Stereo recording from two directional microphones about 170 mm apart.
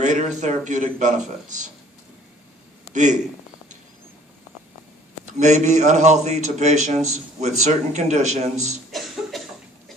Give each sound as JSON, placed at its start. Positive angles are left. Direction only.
{"t": 0.0, "sound": "a man's voice", "side_deg": -45}
{"t": 2.9, "sound": "a man's voice", "side_deg": -45}
{"t": 5.4, "sound": "a man's voice", "side_deg": -45}
{"t": 8.9, "sound": "a sound", "side_deg": 0}